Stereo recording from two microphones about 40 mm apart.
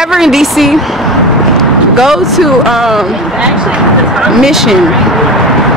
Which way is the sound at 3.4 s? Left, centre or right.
Right.